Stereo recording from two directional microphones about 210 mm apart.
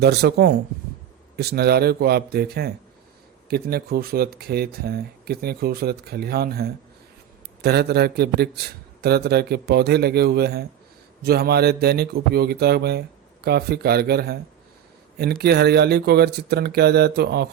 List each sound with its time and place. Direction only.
0.0 s speech: 50° right (ahead or behind)
15.4 s speech: 50° right (ahead or behind)